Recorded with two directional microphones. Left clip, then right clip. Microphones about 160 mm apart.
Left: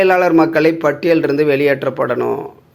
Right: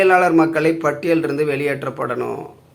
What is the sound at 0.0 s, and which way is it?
Speech, 30° left (ahead or behind).